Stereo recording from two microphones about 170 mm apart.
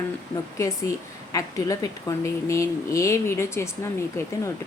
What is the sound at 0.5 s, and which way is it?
A woman's voice, 20° left (ahead or behind).